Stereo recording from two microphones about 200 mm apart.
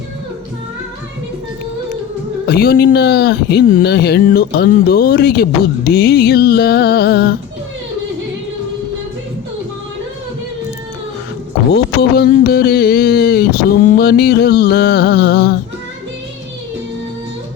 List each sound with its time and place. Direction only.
2.5 s speech: 50° left (ahead or behind)
11.7 s speech: 55° left (ahead or behind)